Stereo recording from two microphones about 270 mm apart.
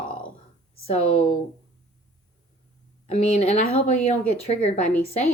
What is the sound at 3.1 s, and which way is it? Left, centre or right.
Speech, left.